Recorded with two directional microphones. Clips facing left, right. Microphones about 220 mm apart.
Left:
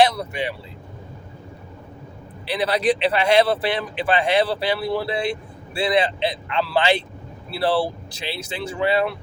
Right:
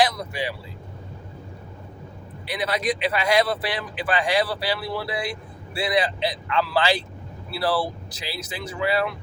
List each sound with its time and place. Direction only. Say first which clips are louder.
0.0 s speech: left 4 dB; 25° left (ahead or behind)
2.5 s speech: left 5 dB; 30° left (ahead or behind)